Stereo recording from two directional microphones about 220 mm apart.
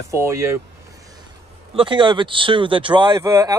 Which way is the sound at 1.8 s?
20° right (ahead or behind).